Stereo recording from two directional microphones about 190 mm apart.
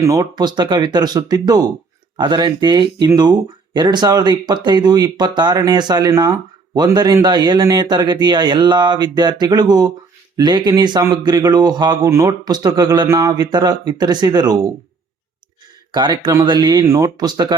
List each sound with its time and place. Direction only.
0.0 s speech: 20° right (ahead or behind)
15.9 s speech: 25° right (ahead or behind)